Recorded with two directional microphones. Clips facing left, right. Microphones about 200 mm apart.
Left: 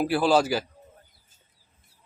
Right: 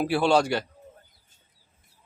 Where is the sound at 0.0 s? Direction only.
Centre (ahead or behind).